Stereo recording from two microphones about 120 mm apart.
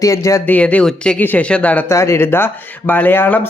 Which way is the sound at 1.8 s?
25° left (ahead or behind).